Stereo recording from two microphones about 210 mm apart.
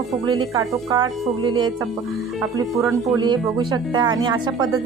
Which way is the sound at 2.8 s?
Centre (ahead or behind).